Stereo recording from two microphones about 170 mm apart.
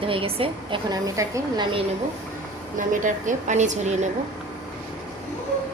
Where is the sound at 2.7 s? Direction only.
50° right (ahead or behind).